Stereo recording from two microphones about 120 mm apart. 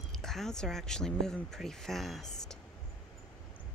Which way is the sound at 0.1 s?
5° left (ahead or behind).